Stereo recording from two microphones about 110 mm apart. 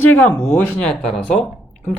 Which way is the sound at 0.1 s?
15° left (ahead or behind).